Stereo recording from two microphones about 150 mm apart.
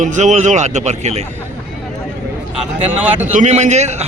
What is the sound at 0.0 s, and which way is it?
Speech, 55° right (ahead or behind).